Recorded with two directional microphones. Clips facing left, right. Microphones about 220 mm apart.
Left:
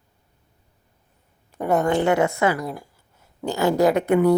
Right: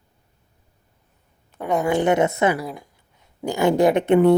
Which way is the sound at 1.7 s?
10° right (ahead or behind).